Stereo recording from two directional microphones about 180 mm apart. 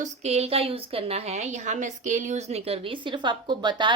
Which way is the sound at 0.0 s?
35° right (ahead or behind).